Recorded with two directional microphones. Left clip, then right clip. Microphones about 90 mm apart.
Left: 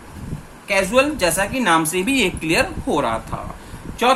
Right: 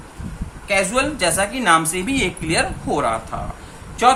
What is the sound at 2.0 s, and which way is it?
Speech, 50° left (ahead or behind).